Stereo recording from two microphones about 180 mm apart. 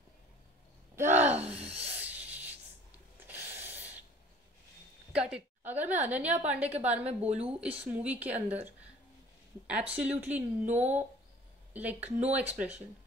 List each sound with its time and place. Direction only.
0.9 s gasp: 10° right (ahead or behind)
1.7 s a sound: 5° right (ahead or behind)
5.1 s a woman's voice: 5° right (ahead or behind)
7.1 s speech: 35° right (ahead or behind)
7.6 s speech: 10° right (ahead or behind)
10.7 s speech: 40° right (ahead or behind)
11.7 s speech: 10° right (ahead or behind)